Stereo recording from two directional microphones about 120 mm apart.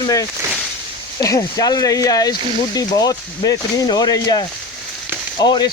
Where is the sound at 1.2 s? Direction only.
30° left (ahead or behind).